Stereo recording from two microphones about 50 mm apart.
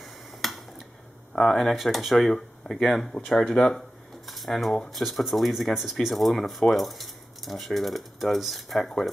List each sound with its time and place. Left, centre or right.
0.0 s finger snapping: centre
1.3 s speech: centre
4.3 s speech: centre